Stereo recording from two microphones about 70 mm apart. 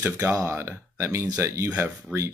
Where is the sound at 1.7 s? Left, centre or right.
Right.